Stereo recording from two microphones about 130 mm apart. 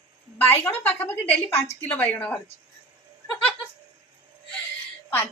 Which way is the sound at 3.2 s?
10° left (ahead or behind).